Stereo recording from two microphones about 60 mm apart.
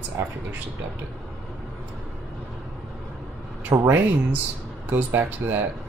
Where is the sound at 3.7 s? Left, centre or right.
Right.